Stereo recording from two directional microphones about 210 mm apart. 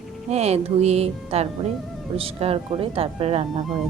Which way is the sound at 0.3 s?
30° right (ahead or behind).